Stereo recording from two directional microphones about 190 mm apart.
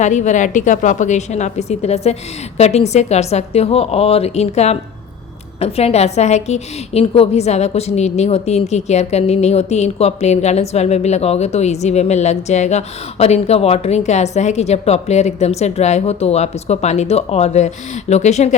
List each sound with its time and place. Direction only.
0.0 s a woman's voice: 40° left (ahead or behind)